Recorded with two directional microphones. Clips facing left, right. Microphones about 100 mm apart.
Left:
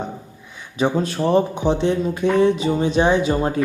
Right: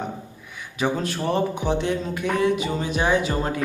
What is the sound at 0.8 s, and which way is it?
Speech, 20° left (ahead or behind).